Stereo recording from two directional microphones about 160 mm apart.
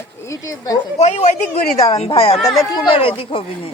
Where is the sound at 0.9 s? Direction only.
45° left (ahead or behind).